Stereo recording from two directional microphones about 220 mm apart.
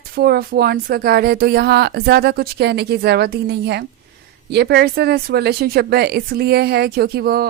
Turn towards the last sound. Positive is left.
turn(degrees=-45)  # may be behind; listen again after turning